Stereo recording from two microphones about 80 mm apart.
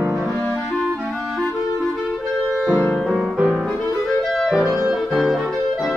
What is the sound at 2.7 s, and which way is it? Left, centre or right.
Music, left.